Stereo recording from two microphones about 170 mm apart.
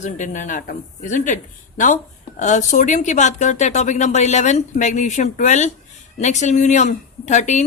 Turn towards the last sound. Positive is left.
turn(degrees=45)  # may be behind; listen again after turning